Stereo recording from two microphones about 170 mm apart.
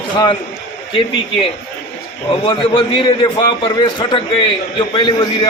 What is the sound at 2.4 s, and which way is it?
A man's voice, 30° left (ahead or behind).